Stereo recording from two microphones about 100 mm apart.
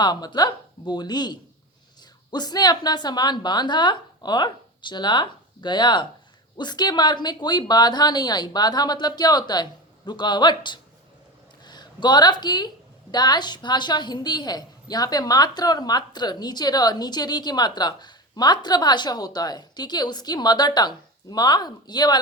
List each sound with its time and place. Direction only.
0.0 s a woman's voice: 45° left (ahead or behind)